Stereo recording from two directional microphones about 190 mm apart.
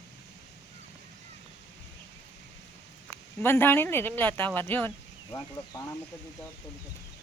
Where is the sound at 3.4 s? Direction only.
10° left (ahead or behind).